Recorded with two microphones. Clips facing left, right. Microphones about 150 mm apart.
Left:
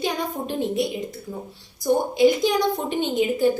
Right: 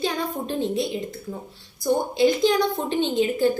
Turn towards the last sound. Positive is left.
turn(degrees=10)  # may be behind; listen again after turning